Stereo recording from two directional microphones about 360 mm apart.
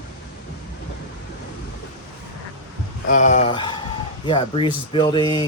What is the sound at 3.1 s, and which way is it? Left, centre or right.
Speech, centre.